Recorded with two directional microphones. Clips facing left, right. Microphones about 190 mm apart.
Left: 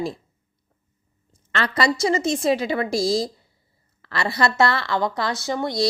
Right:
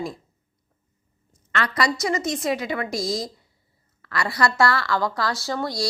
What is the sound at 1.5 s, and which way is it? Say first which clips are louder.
A woman's voice: left 2 dB; 30° left (ahead or behind).